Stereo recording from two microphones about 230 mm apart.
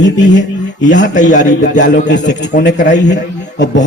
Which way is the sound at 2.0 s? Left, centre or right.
Left.